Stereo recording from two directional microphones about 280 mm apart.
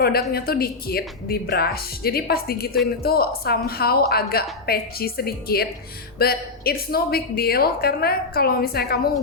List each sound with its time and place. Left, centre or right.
0.0 s a woman's voice: left